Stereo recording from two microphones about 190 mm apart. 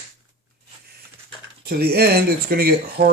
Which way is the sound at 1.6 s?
55° right (ahead or behind).